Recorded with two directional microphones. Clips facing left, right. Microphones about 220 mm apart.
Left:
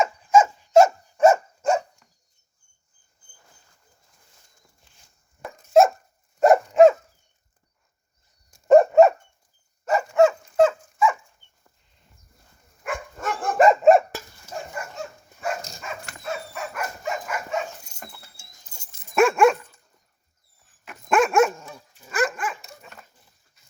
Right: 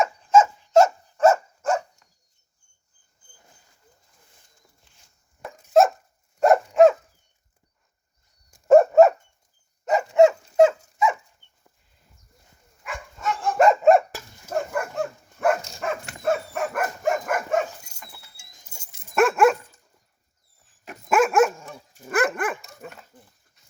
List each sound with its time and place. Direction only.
0.3 s dog: 10° left (ahead or behind)
5.4 s dog: centre (ahead or behind)
8.6 s dog: 5° right (ahead or behind)
10.2 s dog: 20° right (ahead or behind)
12.8 s dog: 50° left (ahead or behind)
13.6 s dog: 5° left (ahead or behind)
14.5 s dog: 60° right (ahead or behind)
18.6 s dog: 10° right (ahead or behind)
21.1 s dog: 5° right (ahead or behind)
21.9 s dog: 55° right (ahead or behind)
22.8 s a sound: 55° right (ahead or behind)